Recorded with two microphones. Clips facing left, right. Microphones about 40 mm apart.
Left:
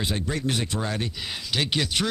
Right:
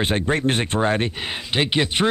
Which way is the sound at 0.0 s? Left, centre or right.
Right.